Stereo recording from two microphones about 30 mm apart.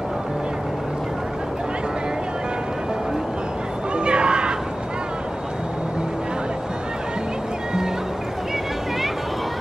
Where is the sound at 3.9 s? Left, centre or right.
Right.